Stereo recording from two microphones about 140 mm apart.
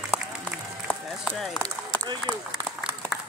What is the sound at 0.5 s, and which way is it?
Run, centre (ahead or behind).